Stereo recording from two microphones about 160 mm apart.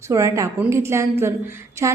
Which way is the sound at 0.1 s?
20° right (ahead or behind).